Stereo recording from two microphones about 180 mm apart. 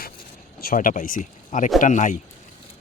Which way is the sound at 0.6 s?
50° left (ahead or behind).